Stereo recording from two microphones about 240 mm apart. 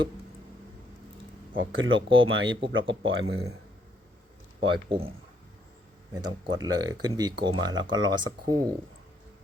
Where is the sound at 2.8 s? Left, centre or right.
Right.